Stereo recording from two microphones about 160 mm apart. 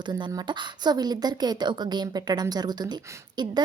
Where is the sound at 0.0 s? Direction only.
25° right (ahead or behind).